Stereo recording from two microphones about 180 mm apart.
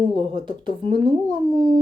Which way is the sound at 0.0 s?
25° right (ahead or behind).